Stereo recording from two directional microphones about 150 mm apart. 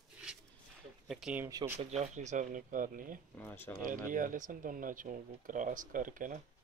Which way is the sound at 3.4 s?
15° left (ahead or behind).